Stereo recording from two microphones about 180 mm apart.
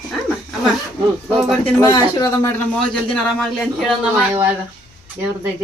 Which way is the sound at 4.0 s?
10° right (ahead or behind).